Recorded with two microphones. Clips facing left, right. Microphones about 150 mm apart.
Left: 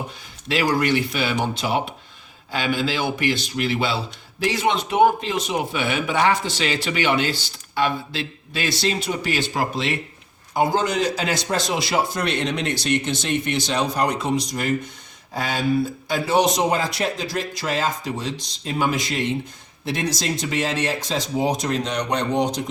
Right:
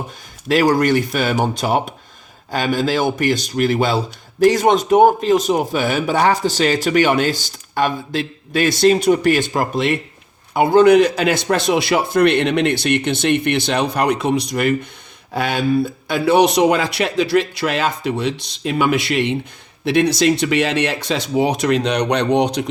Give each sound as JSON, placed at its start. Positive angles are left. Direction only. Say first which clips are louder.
{"t": 0.4, "sound": "a man's voice", "louder": "right 6 dB", "side_deg": -45}